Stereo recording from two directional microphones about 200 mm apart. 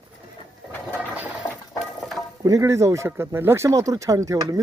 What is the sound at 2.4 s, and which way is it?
Speech, 15° right (ahead or behind).